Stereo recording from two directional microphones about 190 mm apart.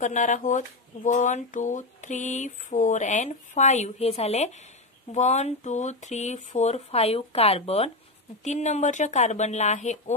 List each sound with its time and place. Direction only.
0.0 s speech: 40° left (ahead or behind)